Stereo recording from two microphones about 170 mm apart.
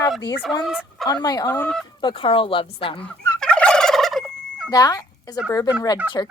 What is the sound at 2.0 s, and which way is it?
Speech, 30° left (ahead or behind).